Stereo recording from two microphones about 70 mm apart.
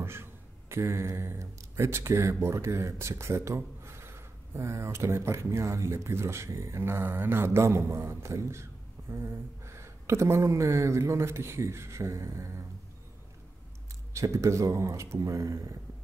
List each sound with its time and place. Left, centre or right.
0.0 s speech: right
14.1 s speech: right